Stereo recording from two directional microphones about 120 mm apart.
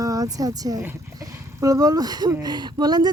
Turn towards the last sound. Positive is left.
turn(degrees=-35)  # may be behind; listen again after turning